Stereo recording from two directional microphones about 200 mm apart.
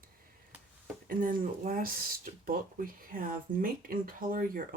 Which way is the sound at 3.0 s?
45° right (ahead or behind).